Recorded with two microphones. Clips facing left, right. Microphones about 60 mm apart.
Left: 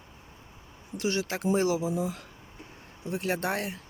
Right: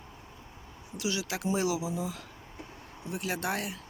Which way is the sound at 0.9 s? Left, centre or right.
Left.